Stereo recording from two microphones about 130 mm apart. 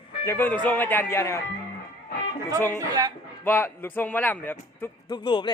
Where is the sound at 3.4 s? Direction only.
15° left (ahead or behind).